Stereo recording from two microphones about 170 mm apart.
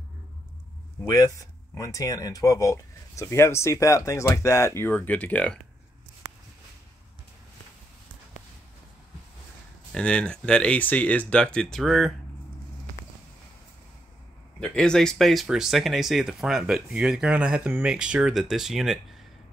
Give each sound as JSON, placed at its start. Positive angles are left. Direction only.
{"t": 1.0, "sound": "speech", "side_deg": 20}
{"t": 9.9, "sound": "speech", "side_deg": 5}
{"t": 14.6, "sound": "speech", "side_deg": 5}